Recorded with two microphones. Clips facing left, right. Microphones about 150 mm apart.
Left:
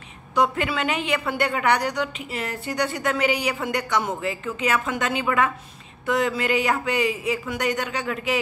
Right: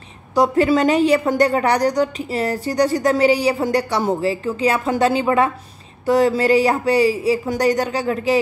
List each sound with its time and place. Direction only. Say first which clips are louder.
0.3 s a woman's voice: right 7 dB; 35° right (ahead or behind)